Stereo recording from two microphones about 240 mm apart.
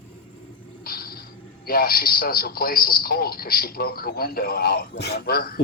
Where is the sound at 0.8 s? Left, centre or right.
Left.